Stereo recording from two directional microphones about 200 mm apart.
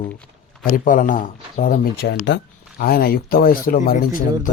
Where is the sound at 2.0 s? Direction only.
65° left (ahead or behind).